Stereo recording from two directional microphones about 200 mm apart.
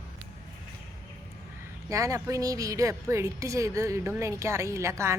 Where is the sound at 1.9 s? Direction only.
15° right (ahead or behind).